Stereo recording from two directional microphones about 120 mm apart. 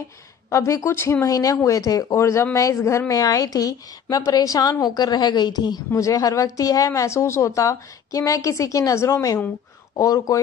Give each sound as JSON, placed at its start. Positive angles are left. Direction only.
{"t": 0.5, "sound": "speech", "side_deg": 25}